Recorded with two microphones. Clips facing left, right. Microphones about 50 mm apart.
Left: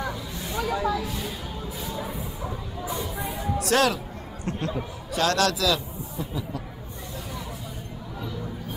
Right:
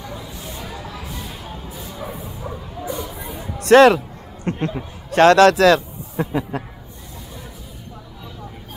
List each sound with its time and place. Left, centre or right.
0.0 s a sound: left
2.0 s bow-wow: right
3.5 s speech: right
4.5 s speech: right
5.1 s a man's voice: right
6.1 s speech: right